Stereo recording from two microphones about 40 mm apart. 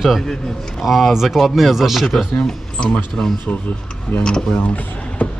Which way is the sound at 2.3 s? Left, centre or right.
Centre.